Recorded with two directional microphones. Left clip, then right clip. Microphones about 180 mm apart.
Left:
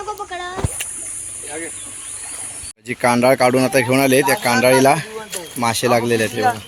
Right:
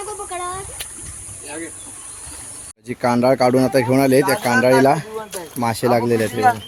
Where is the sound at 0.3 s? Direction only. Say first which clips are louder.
Right 1 dB; 45° right (ahead or behind).